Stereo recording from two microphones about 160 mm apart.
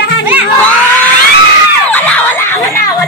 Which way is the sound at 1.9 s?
10° left (ahead or behind).